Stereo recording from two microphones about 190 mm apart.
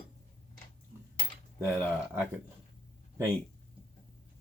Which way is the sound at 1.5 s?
10° right (ahead or behind).